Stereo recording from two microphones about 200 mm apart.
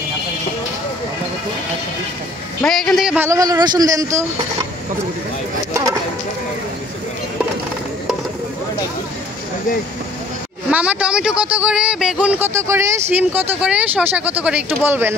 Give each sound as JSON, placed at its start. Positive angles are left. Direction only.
{"t": 2.6, "sound": "a man's voice", "side_deg": 5}
{"t": 3.3, "sound": "speech", "side_deg": -20}
{"t": 5.7, "sound": "bird", "side_deg": -15}
{"t": 10.7, "sound": "speech", "side_deg": -5}